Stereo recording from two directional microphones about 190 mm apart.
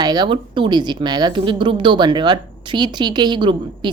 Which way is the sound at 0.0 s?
20° right (ahead or behind).